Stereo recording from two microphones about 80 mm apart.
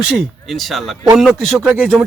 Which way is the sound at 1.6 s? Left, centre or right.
Centre.